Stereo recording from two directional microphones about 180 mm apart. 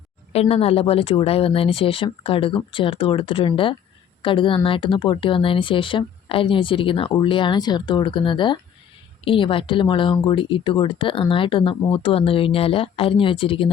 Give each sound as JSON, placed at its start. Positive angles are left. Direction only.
{"t": 0.3, "sound": "speech", "side_deg": 35}